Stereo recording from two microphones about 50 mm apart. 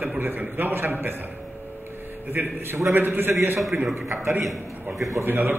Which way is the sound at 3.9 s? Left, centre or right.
Right.